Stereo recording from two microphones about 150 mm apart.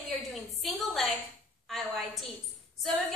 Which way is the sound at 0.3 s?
Centre (ahead or behind).